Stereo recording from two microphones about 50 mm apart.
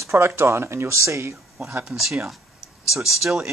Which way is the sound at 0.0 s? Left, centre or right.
Right.